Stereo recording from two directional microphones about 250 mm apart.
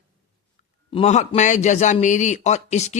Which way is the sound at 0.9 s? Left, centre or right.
Left.